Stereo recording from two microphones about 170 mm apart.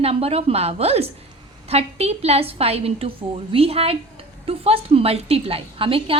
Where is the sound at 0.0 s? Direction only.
35° right (ahead or behind).